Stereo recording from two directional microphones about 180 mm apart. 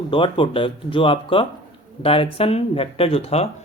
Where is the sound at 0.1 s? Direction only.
30° left (ahead or behind).